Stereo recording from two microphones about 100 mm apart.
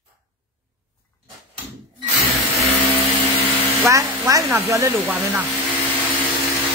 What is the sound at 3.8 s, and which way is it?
A woman's voice, 30° right (ahead or behind).